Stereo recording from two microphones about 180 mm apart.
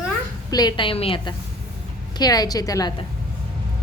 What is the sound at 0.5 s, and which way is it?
A woman's voice, 25° left (ahead or behind).